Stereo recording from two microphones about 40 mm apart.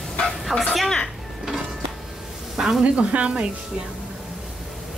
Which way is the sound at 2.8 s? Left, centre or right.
Right.